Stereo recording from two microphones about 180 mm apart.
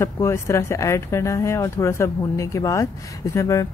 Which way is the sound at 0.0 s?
15° left (ahead or behind).